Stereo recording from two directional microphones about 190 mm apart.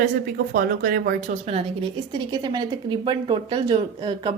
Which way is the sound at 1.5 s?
30° right (ahead or behind).